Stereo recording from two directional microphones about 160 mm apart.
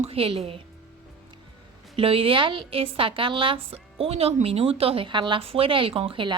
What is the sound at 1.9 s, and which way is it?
A woman's voice, 35° right (ahead or behind).